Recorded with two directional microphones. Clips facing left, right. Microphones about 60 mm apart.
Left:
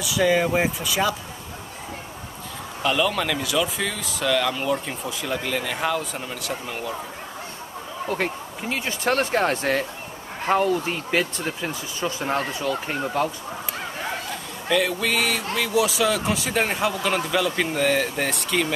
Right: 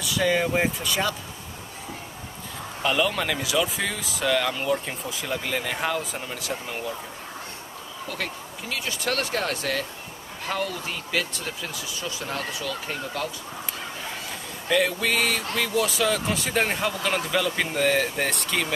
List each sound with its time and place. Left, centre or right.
0.0 s speech: centre
2.8 s speech: centre
8.1 s speech: left
14.7 s speech: centre